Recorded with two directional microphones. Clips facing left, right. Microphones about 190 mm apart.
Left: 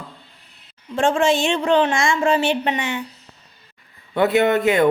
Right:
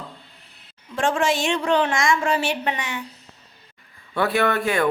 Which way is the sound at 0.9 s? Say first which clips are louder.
Left 4 dB; 25° left (ahead or behind).